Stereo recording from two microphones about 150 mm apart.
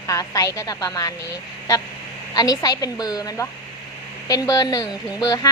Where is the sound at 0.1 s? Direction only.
20° left (ahead or behind).